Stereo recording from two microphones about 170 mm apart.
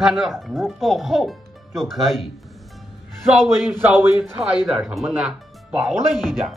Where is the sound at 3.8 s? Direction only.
10° right (ahead or behind).